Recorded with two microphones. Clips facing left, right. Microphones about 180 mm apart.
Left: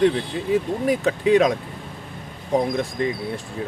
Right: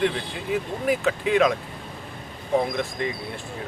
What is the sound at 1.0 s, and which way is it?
Speech, 35° left (ahead or behind).